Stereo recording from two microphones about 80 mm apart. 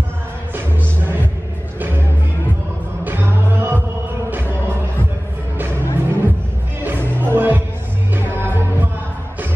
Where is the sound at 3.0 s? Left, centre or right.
Right.